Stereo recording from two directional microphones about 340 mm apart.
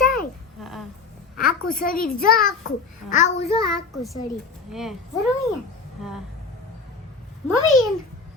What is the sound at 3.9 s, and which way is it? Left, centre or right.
Speech, centre.